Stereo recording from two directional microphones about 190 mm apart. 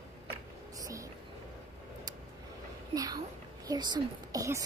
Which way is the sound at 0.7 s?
20° right (ahead or behind).